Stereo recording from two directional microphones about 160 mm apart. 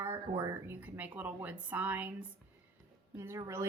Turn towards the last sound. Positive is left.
turn(degrees=-15)  # may be behind; listen again after turning